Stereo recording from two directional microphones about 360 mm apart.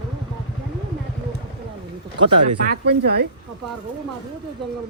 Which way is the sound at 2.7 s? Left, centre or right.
Right.